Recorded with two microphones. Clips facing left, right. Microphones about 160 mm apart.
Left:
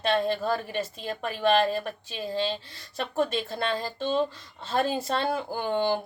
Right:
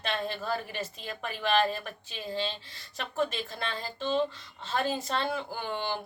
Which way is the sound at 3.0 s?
35° left (ahead or behind).